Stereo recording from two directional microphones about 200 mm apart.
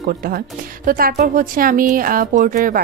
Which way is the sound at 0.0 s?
45° right (ahead or behind).